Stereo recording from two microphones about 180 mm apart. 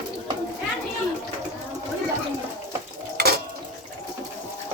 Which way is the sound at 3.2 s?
60° right (ahead or behind).